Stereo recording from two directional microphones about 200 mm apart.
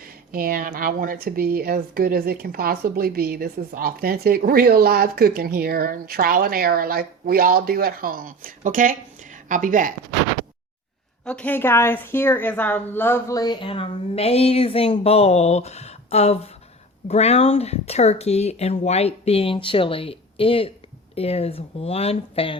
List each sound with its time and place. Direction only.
0.0 s speech: 45° right (ahead or behind)
11.3 s a woman's voice: 5° left (ahead or behind); by 22.5 s 30° left (ahead or behind)